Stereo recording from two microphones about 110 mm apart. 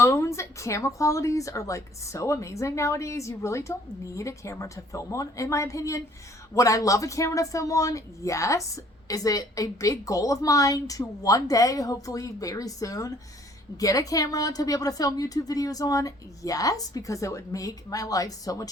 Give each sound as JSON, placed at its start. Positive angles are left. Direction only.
{"t": 0.0, "sound": "speech", "side_deg": 25}